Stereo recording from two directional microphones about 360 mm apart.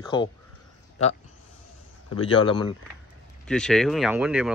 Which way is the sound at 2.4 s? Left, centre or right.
Centre.